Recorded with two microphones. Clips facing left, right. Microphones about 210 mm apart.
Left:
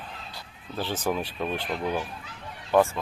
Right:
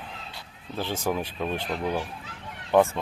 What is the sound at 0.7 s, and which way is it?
Speech, 10° right (ahead or behind).